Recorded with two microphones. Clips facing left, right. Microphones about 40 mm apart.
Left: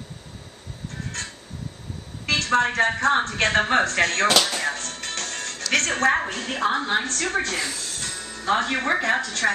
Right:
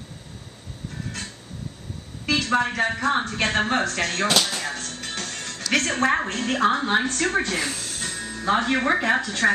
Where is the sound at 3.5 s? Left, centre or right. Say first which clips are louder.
Left 3 dB; centre.